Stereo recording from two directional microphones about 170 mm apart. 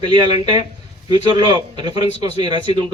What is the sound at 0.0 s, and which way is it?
A man's voice, 30° right (ahead or behind).